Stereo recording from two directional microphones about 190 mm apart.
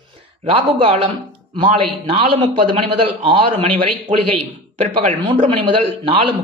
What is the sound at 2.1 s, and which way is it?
Speech, 25° right (ahead or behind).